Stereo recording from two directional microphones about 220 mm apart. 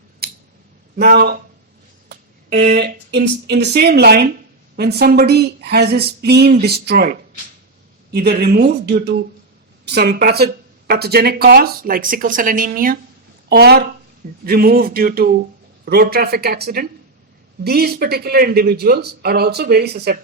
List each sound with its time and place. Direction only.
0.2 s scissors: 45° right (ahead or behind)
0.9 s speech: 45° right (ahead or behind)